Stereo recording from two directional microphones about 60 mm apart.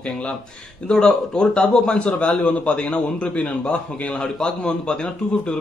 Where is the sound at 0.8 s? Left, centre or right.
Centre.